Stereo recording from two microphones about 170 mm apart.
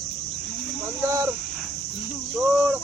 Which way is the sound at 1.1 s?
20° right (ahead or behind).